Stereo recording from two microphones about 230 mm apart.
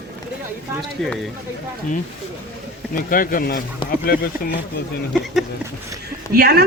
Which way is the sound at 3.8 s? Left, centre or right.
Left.